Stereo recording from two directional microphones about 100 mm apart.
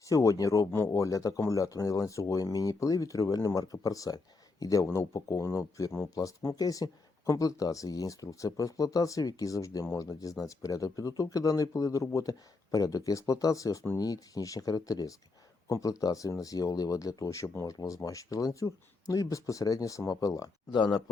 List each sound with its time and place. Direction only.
0.1 s speech: 35° left (ahead or behind)
20.7 s speech: 50° left (ahead or behind)